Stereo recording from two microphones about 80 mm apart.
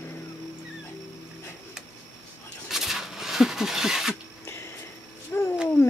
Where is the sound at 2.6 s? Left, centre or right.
Centre.